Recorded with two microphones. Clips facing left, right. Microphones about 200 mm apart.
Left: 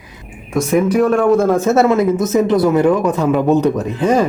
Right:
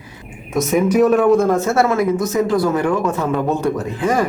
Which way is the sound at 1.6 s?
20° left (ahead or behind).